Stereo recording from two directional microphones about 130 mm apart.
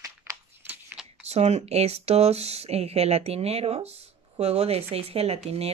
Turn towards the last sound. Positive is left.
turn(degrees=-50)  # may be behind; listen again after turning